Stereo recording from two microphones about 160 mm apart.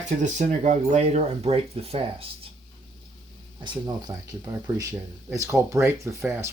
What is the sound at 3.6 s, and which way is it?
Speech, 20° right (ahead or behind).